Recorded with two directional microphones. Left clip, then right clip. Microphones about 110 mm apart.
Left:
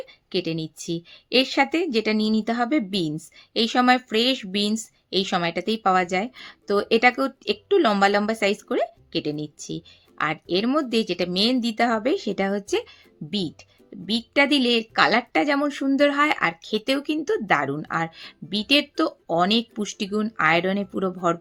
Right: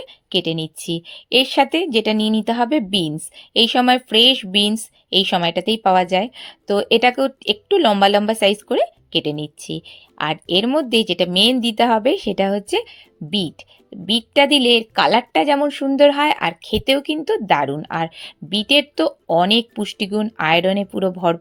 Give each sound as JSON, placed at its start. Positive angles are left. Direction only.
{"t": 0.0, "sound": "a woman's voice", "side_deg": -45}
{"t": 14.1, "sound": "a woman's voice", "side_deg": -40}